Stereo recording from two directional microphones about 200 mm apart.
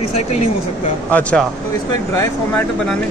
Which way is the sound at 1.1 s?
5° left (ahead or behind).